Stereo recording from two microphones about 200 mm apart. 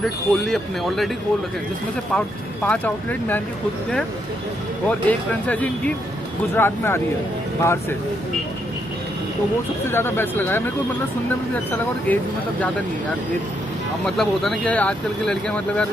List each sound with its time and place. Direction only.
0.0 s speech: centre (ahead or behind)
2.1 s speech: 5° left (ahead or behind)
4.8 s speech: 5° left (ahead or behind)
9.8 s speech: 10° left (ahead or behind)
12.1 s speech: 10° left (ahead or behind)
14.0 s speech: centre (ahead or behind)